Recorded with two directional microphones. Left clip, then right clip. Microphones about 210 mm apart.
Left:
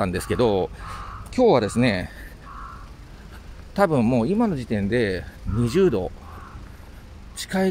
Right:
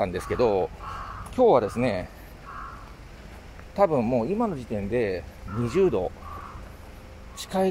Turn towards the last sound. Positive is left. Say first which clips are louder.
# left 1 dB
turn(degrees=25)  # may be behind; listen again after turning